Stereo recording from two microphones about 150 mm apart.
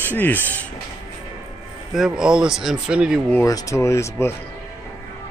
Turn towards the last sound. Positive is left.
turn(degrees=20)  # may be behind; listen again after turning